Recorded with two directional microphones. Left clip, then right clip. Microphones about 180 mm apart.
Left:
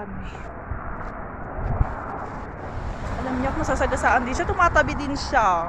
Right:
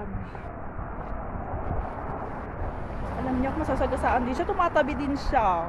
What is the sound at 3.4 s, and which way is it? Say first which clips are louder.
Speech: left 5 dB; centre (ahead or behind).